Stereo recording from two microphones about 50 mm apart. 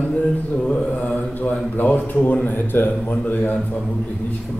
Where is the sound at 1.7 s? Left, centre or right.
Left.